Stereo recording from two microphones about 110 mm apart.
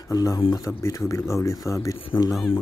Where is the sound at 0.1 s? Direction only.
30° left (ahead or behind).